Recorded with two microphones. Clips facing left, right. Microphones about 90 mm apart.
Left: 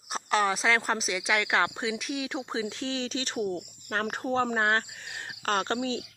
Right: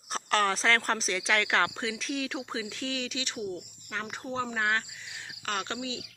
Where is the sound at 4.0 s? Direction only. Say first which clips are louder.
Left 6 dB; 50° left (ahead or behind).